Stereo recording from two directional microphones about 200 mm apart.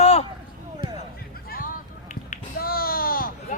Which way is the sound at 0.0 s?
30° left (ahead or behind).